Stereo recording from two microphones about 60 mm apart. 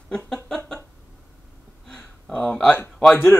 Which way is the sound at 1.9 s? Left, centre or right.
Centre.